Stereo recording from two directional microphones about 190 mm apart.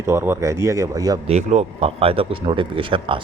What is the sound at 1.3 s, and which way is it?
A man's voice, 35° right (ahead or behind).